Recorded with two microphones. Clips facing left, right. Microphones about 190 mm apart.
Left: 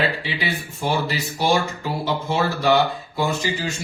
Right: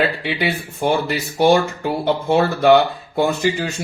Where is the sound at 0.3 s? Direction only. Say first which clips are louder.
Right 5 dB; 60° right (ahead or behind).